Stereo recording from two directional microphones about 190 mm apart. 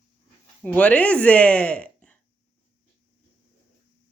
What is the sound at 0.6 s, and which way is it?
Speech, 5° left (ahead or behind).